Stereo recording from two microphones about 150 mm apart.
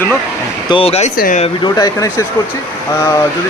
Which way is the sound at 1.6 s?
25° left (ahead or behind).